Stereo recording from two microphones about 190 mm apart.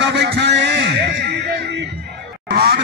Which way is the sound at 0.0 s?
65° right (ahead or behind).